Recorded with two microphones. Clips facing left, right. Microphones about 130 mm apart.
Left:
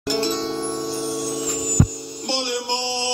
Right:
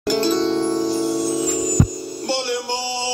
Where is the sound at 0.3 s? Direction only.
40° left (ahead or behind).